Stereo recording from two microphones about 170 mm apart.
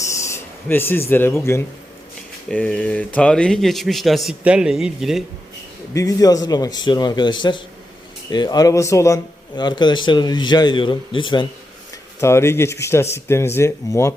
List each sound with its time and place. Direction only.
0.1 s speech: 15° left (ahead or behind); by 5.2 s centre (ahead or behind)
5.9 s speech: 20° left (ahead or behind)
12.2 s speech: 15° left (ahead or behind)